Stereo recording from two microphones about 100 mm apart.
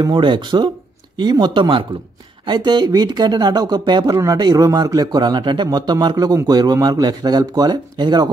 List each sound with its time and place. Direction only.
0.0 s speech: 50° right (ahead or behind)